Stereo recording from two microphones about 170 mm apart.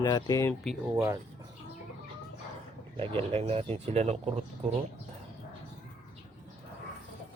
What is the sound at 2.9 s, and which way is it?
Speech, 30° right (ahead or behind).